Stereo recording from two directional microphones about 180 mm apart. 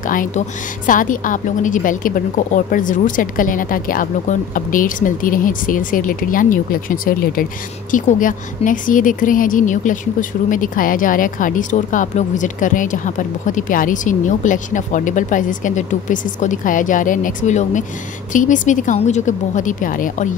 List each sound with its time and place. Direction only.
0.0 s speech: 50° left (ahead or behind)